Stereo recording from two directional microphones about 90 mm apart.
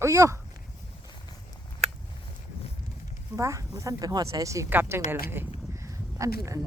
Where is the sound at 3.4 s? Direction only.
35° right (ahead or behind).